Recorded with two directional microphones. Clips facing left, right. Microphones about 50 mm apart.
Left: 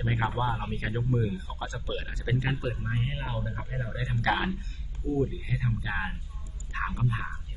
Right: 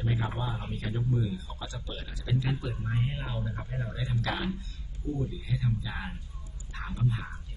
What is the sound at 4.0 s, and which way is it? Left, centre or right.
A man's voice, left.